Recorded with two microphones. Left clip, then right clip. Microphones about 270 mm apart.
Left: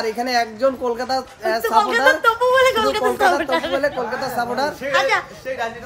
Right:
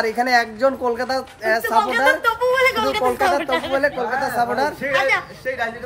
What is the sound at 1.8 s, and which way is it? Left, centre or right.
A woman's voice, centre.